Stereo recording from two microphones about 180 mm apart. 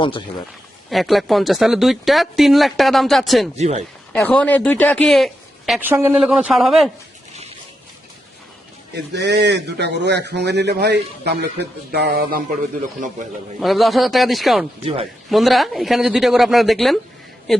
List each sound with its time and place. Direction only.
0.9 s speech: centre (ahead or behind)
3.5 s speech: 40° right (ahead or behind)
4.1 s speech: 5° left (ahead or behind)
5.9 s speech: 10° right (ahead or behind)
9.1 s a man's voice: 70° right (ahead or behind); by 12.5 s 55° right (ahead or behind)
13.6 s speech: centre (ahead or behind)